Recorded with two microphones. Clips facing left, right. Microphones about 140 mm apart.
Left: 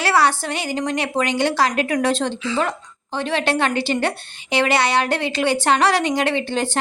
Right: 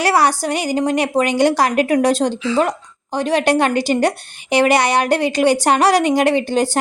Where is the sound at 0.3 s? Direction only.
40° right (ahead or behind).